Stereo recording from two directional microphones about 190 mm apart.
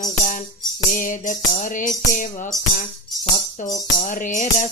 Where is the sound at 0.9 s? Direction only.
45° left (ahead or behind).